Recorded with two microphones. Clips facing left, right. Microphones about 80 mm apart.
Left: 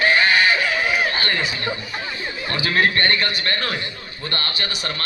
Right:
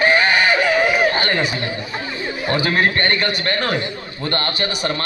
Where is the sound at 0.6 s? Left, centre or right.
Right.